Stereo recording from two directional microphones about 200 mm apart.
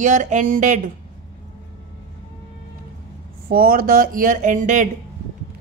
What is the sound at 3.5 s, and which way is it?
A woman's voice, 45° right (ahead or behind).